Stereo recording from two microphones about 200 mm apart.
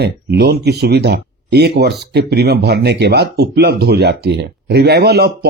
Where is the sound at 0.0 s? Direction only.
50° right (ahead or behind).